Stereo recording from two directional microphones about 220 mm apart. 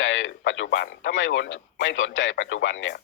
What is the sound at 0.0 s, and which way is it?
Speech, 60° left (ahead or behind).